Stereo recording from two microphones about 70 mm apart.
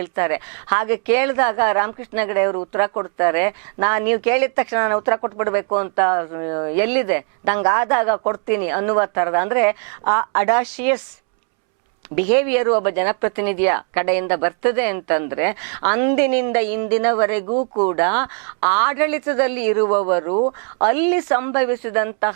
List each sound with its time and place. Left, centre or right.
0.0 s speech: right
12.1 s speech: centre